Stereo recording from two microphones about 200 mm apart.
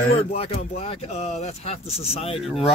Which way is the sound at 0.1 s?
30° left (ahead or behind).